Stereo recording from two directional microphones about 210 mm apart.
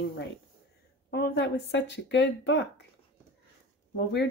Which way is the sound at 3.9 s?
55° left (ahead or behind).